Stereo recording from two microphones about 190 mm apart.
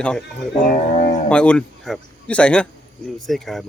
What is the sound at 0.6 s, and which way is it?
Music, 45° left (ahead or behind).